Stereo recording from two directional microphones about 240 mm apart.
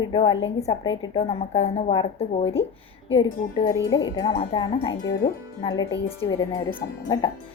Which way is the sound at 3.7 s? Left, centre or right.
Centre.